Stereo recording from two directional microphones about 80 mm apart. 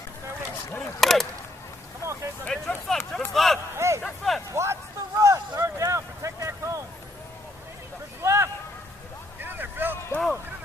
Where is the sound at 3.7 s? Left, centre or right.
Right.